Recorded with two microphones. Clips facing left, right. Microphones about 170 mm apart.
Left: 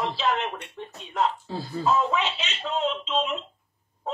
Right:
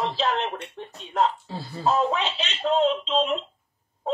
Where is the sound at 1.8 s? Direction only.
35° right (ahead or behind).